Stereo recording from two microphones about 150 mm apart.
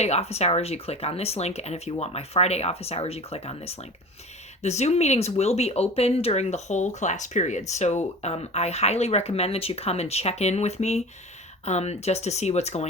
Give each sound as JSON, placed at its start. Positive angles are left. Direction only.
{"t": 0.0, "sound": "speech", "side_deg": 45}